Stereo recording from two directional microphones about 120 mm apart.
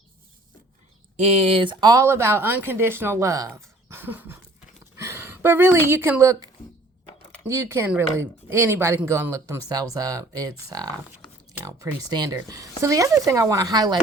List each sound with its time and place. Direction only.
1.1 s a woman's voice: 60° right (ahead or behind); by 14.0 s 35° right (ahead or behind)